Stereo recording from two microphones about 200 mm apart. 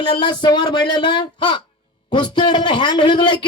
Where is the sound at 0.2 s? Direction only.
25° left (ahead or behind).